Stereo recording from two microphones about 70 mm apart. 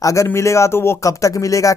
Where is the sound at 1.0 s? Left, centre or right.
Left.